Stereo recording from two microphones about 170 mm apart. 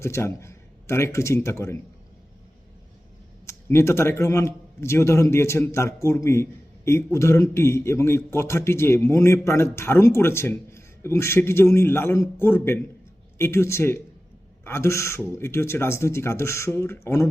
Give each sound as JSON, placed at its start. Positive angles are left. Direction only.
{"t": 0.0, "sound": "a man's voice", "side_deg": 15}
{"t": 3.4, "sound": "a man's voice", "side_deg": 15}